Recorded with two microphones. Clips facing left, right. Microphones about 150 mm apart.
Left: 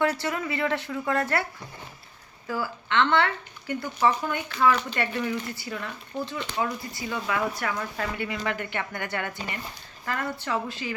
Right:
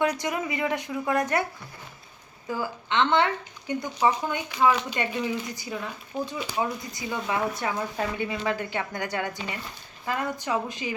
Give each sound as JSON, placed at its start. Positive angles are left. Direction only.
{"t": 0.0, "sound": "speech", "side_deg": -15}
{"t": 2.5, "sound": "speech", "side_deg": -20}